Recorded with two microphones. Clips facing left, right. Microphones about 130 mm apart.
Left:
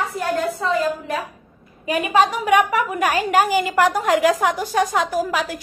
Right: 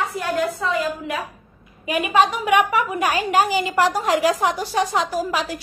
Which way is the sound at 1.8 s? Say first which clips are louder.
Even; 35° left (ahead or behind).